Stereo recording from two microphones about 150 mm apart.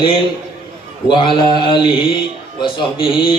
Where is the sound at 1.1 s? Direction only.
30° left (ahead or behind).